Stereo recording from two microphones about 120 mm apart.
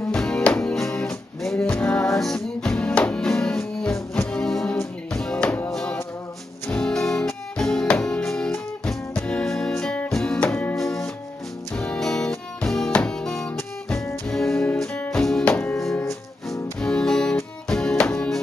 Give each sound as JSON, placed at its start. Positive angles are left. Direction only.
{"t": 0.1, "sound": "music", "side_deg": 5}